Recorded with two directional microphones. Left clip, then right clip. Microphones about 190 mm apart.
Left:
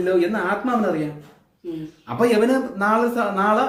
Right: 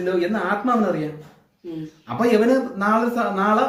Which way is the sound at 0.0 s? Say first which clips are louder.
Left 2 dB; 20° left (ahead or behind).